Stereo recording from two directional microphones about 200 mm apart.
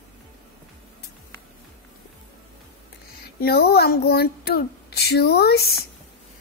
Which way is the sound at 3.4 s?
55° left (ahead or behind).